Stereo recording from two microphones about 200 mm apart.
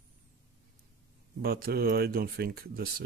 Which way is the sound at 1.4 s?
50° right (ahead or behind).